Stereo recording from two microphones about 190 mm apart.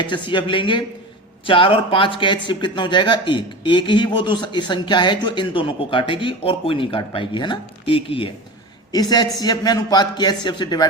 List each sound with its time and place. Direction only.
0.0 s speech: 25° left (ahead or behind)